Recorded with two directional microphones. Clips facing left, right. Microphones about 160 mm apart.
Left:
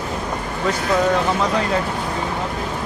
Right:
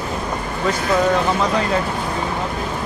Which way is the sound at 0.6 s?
20° right (ahead or behind).